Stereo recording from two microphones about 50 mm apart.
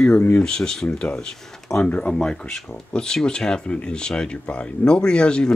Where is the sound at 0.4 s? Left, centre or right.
Centre.